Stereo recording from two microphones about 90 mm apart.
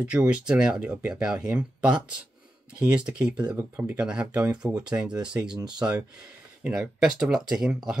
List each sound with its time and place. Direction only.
0.0 s speech: 15° right (ahead or behind)